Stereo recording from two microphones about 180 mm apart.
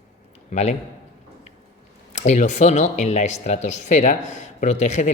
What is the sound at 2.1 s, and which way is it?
Speech, 40° left (ahead or behind).